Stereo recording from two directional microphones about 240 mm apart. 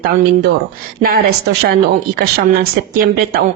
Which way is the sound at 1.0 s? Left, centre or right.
Right.